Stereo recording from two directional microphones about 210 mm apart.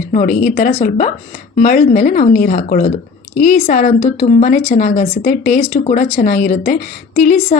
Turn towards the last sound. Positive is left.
turn(degrees=40)  # may be behind; listen again after turning